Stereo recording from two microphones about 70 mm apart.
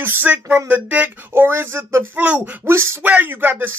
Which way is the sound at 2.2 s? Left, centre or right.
Right.